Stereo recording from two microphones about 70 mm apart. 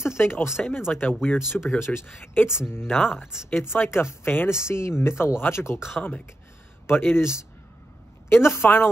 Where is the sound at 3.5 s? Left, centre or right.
Left.